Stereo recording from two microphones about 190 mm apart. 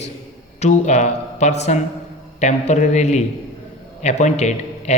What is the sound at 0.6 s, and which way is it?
A man's voice, 35° left (ahead or behind).